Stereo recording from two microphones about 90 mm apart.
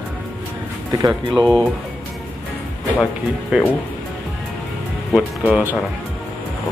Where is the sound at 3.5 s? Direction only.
10° right (ahead or behind).